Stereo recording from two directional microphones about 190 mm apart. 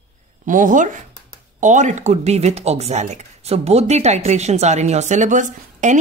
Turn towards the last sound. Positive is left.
turn(degrees=-40)  # may be behind; listen again after turning